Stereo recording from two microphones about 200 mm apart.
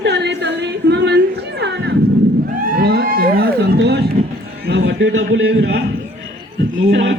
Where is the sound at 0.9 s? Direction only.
60° right (ahead or behind).